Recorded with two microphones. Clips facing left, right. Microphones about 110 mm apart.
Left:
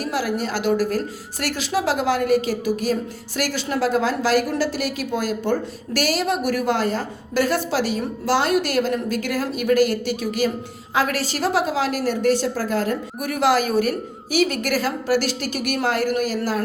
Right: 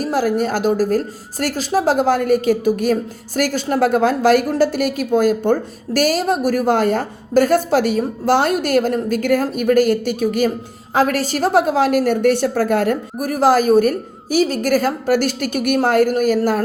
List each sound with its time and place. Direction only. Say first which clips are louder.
0.0 s a woman's voice: right 6 dB; 45° right (ahead or behind)
13.1 s a woman's voice: right 4 dB; 40° right (ahead or behind)